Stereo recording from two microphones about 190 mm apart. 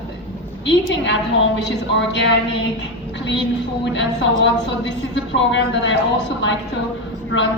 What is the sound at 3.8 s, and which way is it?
A woman's voice, 75° left (ahead or behind).